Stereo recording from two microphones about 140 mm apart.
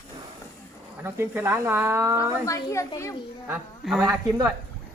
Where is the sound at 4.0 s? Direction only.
20° right (ahead or behind).